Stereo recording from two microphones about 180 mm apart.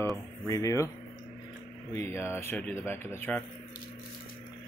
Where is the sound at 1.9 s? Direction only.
15° left (ahead or behind).